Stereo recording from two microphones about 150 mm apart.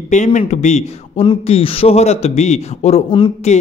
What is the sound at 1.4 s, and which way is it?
A man's voice, 40° left (ahead or behind).